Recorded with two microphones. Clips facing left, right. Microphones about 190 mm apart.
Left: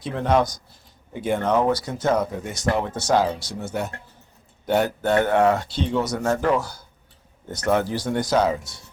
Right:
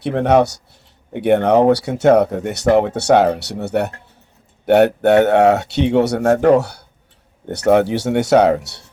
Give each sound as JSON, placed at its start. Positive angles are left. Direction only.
{"t": 0.0, "sound": "speech", "side_deg": -65}